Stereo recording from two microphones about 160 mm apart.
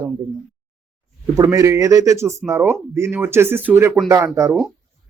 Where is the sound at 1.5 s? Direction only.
20° right (ahead or behind).